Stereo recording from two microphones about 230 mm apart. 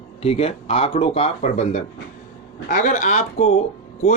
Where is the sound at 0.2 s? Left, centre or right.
Left.